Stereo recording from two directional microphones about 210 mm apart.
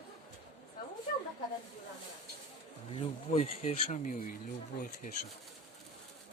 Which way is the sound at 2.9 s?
25° left (ahead or behind).